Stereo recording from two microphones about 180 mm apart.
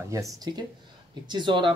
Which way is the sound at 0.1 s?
20° right (ahead or behind).